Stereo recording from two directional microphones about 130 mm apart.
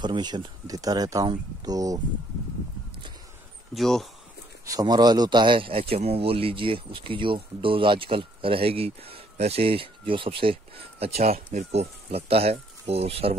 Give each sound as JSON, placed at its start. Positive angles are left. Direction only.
{"t": 0.0, "sound": "speech", "side_deg": -35}
{"t": 3.7, "sound": "speech", "side_deg": 0}
{"t": 4.6, "sound": "speech", "side_deg": -30}